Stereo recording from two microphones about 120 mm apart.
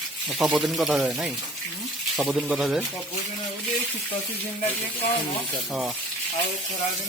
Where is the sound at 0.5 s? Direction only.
Centre (ahead or behind).